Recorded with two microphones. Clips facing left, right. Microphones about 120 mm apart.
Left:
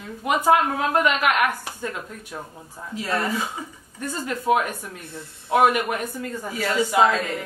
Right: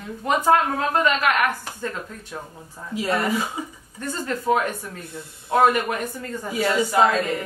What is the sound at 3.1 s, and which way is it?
Speech, 5° right (ahead or behind).